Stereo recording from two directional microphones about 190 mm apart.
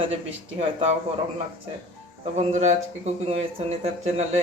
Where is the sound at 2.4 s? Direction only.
40° right (ahead or behind).